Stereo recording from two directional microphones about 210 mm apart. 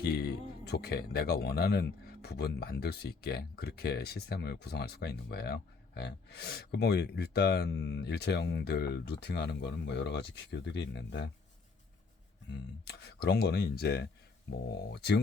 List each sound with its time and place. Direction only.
0.0 s speech: 50° left (ahead or behind)
12.8 s speech: 50° left (ahead or behind)